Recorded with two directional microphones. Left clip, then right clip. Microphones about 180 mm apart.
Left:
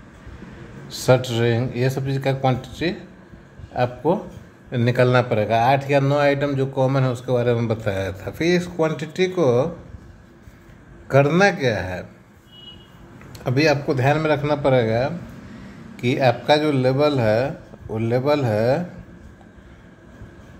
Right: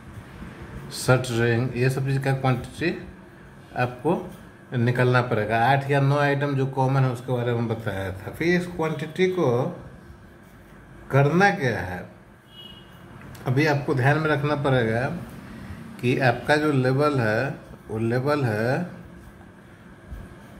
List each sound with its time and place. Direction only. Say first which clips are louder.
0.8 s a man's voice: left 5 dB; 20° left (ahead or behind); by 9.7 s 35° left (ahead or behind)
11.1 s a man's voice: left 4 dB; 35° left (ahead or behind)
13.4 s a man's voice: left 4 dB; 30° left (ahead or behind)